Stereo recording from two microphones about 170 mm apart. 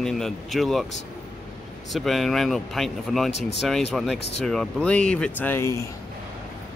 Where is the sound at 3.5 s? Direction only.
Centre (ahead or behind); by 5.9 s 15° left (ahead or behind).